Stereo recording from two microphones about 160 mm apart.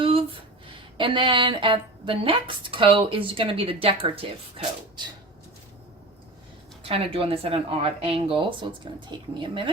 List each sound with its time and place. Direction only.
0.0 s a sound: 35° right (ahead or behind)
0.9 s a woman's voice: 30° right (ahead or behind)
6.8 s a woman's voice: 35° right (ahead or behind)